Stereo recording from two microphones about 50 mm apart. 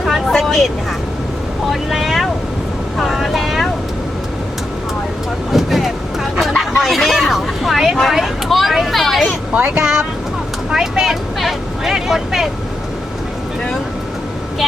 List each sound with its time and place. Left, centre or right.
0.0 s vehicle: centre
1.7 s speech: centre
3.0 s vehicle: centre
5.5 s vehicle: centre
6.6 s speech: centre
9.5 s speech: right; by 12.5 s centre